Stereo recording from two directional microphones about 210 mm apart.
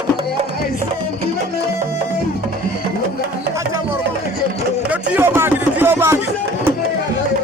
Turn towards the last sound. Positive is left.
turn(degrees=-10)  # may be behind; listen again after turning